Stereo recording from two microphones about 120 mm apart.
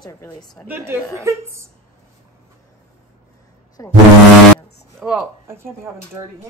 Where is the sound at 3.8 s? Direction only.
25° left (ahead or behind).